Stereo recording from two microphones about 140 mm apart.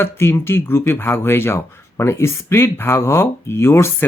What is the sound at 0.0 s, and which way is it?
Speech, 15° left (ahead or behind).